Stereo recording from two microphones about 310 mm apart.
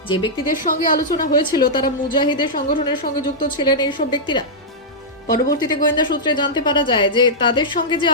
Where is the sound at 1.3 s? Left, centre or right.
Centre.